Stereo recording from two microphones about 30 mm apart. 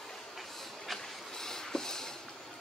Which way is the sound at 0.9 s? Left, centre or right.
Centre.